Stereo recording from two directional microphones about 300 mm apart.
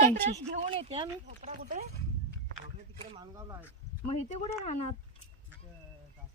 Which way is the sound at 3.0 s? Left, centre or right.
Centre.